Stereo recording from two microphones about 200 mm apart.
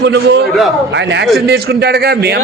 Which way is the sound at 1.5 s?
55° right (ahead or behind).